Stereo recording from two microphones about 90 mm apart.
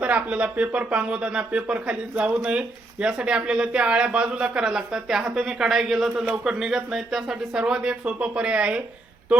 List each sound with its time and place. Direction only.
0.0 s speech: 15° right (ahead or behind)